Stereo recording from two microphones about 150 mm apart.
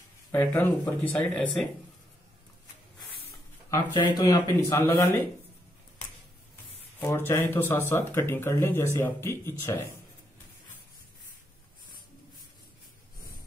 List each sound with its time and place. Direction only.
0.3 s speech: 15° left (ahead or behind)
3.9 s speech: 30° left (ahead or behind)
4.7 s speech: 15° left (ahead or behind)
7.0 s speech: 15° left (ahead or behind)